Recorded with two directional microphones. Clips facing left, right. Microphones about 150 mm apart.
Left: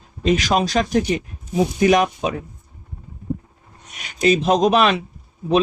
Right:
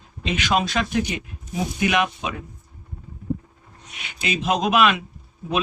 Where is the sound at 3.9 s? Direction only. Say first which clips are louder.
Left 10 dB; 40° left (ahead or behind).